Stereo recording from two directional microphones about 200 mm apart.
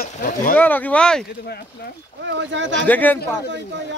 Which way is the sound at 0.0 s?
45° left (ahead or behind).